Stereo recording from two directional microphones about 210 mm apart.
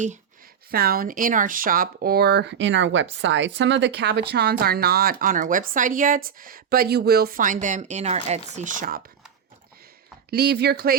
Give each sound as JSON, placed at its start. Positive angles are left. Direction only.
{"t": 0.7, "sound": "speech", "side_deg": -45}
{"t": 10.2, "sound": "speech", "side_deg": -50}